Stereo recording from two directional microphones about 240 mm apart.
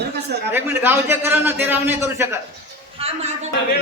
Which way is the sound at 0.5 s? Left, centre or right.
Centre.